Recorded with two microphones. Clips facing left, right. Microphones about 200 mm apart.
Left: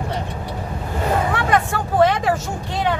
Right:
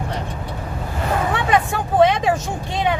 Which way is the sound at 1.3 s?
20° right (ahead or behind).